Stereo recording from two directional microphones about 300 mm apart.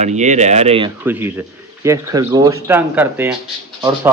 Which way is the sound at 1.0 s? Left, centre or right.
Centre.